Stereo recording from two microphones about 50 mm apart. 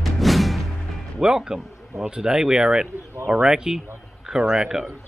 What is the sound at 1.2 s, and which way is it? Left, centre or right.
Speech, centre.